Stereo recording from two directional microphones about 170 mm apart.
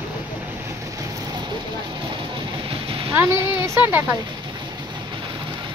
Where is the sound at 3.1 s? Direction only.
15° right (ahead or behind).